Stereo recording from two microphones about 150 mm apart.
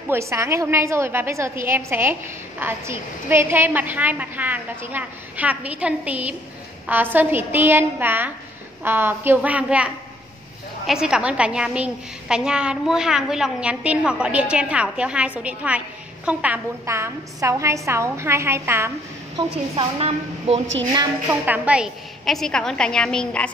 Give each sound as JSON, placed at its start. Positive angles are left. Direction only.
{"t": 0.1, "sound": "a woman's voice", "side_deg": -20}
{"t": 19.7, "sound": "a woman's voice", "side_deg": -40}
{"t": 21.3, "sound": "a woman's voice", "side_deg": -10}